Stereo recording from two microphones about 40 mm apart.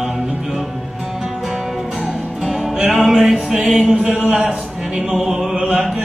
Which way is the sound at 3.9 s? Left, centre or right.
Right.